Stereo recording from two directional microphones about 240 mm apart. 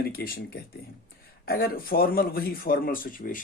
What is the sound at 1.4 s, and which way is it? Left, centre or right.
Speech, left.